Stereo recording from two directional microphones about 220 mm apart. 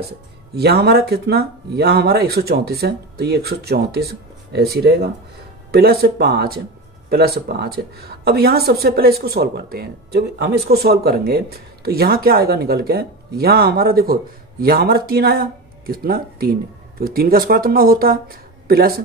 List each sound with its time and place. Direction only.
0.6 s a woman's voice: 45° right (ahead or behind)